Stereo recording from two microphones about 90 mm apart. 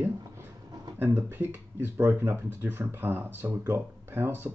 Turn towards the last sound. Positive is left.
turn(degrees=-25)  # may be behind; listen again after turning